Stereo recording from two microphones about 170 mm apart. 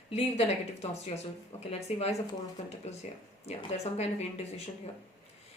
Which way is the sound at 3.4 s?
40° left (ahead or behind).